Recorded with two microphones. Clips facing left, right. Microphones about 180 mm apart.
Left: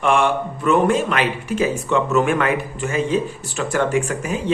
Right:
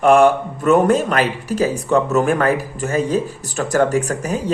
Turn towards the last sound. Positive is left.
turn(degrees=-40)  # may be behind; listen again after turning